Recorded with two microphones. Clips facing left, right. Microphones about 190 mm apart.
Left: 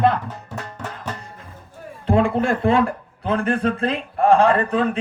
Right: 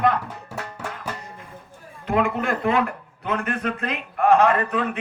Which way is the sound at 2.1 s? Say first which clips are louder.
Left 4 dB; 30° left (ahead or behind).